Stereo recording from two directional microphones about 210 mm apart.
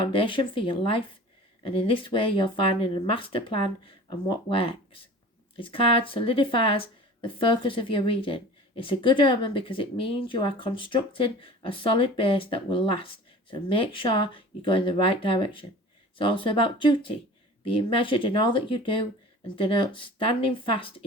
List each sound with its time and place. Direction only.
0.0 s speech: 25° left (ahead or behind)